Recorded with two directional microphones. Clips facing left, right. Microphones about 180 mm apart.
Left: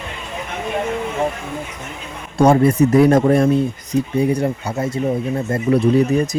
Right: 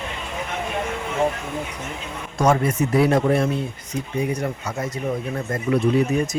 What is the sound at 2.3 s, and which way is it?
Speech, 35° left (ahead or behind).